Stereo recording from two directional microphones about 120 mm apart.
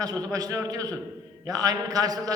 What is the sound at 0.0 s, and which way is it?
A man's voice, 30° right (ahead or behind).